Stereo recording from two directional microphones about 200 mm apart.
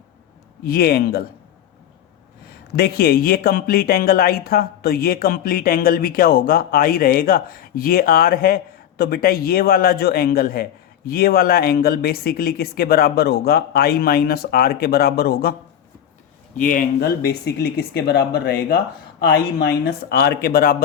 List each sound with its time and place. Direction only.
0.6 s speech: 50° left (ahead or behind)
2.5 s speech: 50° left (ahead or behind)
16.6 s speech: 40° left (ahead or behind)